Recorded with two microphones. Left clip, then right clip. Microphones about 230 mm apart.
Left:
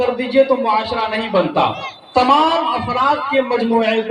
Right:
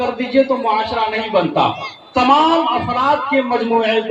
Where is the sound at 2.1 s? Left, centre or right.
Left.